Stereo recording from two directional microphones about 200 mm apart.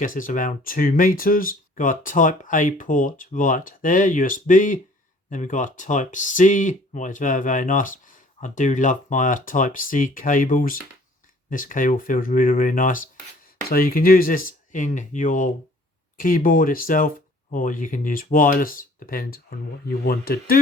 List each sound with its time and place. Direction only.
0.0 s speech: 45° left (ahead or behind)